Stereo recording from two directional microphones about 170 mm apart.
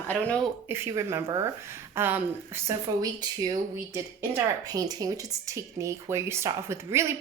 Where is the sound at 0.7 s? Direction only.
15° right (ahead or behind).